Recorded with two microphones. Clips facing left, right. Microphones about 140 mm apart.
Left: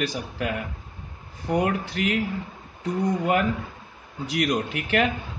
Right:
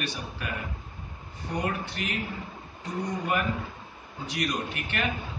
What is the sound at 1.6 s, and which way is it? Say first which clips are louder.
Speech: left 6 dB; 80° left.